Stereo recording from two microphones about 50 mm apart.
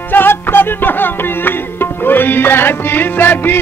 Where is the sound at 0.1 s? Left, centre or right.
Left.